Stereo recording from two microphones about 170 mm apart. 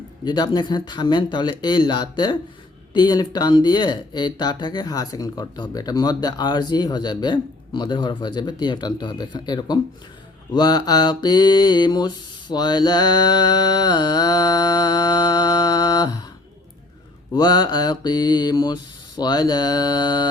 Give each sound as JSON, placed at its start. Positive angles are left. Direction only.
{"t": 0.3, "sound": "speech", "side_deg": 25}
{"t": 17.3, "sound": "speech", "side_deg": 25}